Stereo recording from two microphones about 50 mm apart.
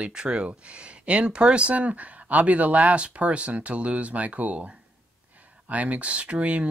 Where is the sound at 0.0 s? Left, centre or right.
Centre.